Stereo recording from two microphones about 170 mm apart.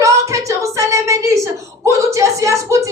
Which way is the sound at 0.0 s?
20° right (ahead or behind).